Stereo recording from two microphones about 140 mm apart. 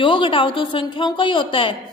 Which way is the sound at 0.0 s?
35° left (ahead or behind).